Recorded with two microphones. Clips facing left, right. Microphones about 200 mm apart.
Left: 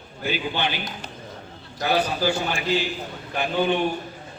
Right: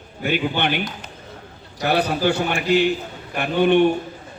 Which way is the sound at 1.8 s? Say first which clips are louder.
Right 3 dB; 60° right (ahead or behind).